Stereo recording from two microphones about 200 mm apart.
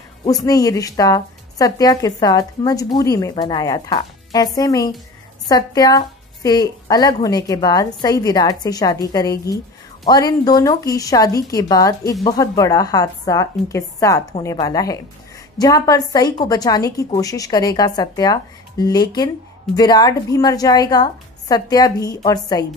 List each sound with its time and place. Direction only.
0.2 s a woman's voice: 20° left (ahead or behind)